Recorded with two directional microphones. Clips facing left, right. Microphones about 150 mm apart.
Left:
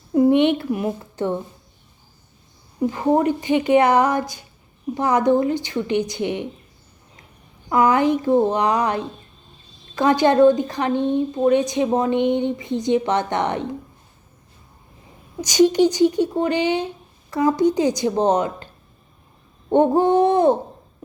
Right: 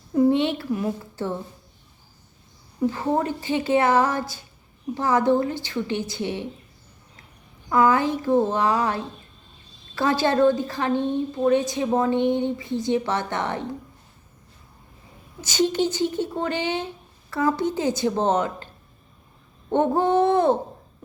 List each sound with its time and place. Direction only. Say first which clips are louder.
0.1 s speech: left 4 dB; 15° left (ahead or behind)
2.8 s speech: left 5 dB; 15° left (ahead or behind)
7.7 s a woman's voice: left 3 dB; 20° left (ahead or behind)
15.4 s speech: left 7 dB; 15° left (ahead or behind)
19.7 s speech: left 4 dB; 15° left (ahead or behind)